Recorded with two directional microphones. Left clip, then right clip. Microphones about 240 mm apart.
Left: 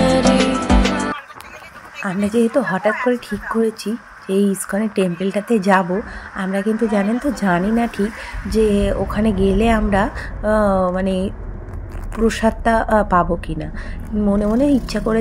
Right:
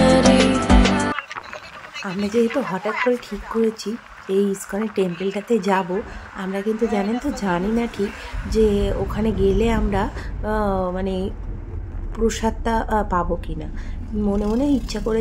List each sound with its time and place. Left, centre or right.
0.0 s music: centre
2.0 s a woman's voice: centre